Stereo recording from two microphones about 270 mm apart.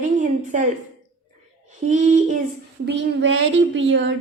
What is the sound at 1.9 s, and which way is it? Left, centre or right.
Speech, right.